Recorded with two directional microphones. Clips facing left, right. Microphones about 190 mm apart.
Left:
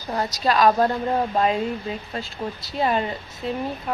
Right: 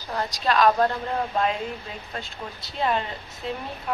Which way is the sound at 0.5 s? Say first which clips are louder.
Left 2 dB; 5° left (ahead or behind).